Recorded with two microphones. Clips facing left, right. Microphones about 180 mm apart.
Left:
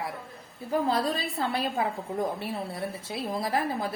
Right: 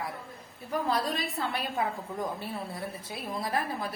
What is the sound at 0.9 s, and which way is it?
A woman's voice, 30° left (ahead or behind).